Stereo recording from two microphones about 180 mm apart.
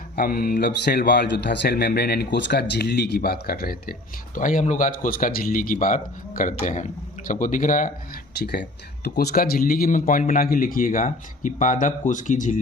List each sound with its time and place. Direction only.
0.2 s a man's voice: 55° left (ahead or behind)